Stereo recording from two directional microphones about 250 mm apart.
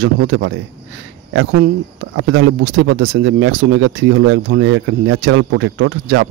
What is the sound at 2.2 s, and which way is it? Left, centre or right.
Speech, right.